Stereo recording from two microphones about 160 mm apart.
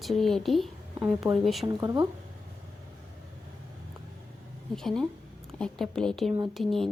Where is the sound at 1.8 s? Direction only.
30° right (ahead or behind).